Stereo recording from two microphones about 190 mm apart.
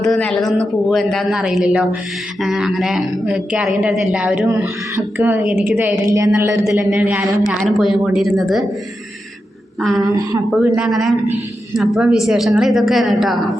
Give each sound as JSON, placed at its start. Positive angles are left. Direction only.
{"t": 0.0, "sound": "a woman's voice", "side_deg": 5}
{"t": 4.4, "sound": "a woman's voice", "side_deg": -15}
{"t": 10.0, "sound": "a woman's voice", "side_deg": -15}
{"t": 10.6, "sound": "a woman's voice", "side_deg": -5}